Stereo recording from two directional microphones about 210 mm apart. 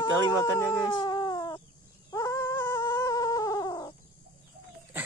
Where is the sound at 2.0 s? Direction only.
15° left (ahead or behind).